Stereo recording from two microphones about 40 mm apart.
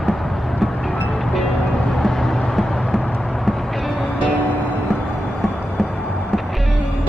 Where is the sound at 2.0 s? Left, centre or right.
Centre.